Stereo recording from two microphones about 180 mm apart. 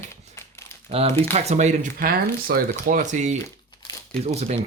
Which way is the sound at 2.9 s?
45° right (ahead or behind).